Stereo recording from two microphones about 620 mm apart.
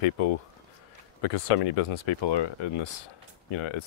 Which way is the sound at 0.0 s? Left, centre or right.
Left.